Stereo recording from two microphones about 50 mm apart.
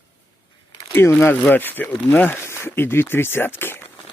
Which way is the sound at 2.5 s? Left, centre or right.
Left.